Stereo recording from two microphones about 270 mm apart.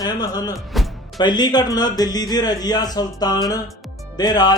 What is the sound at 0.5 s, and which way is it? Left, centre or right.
Speech, centre.